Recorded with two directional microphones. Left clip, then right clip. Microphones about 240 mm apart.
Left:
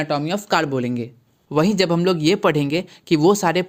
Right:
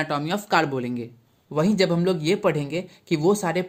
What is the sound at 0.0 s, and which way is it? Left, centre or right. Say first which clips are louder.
Speech: left 3 dB; centre.